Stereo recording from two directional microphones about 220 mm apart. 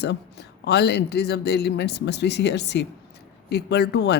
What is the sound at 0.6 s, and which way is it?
Speech, 50° left (ahead or behind).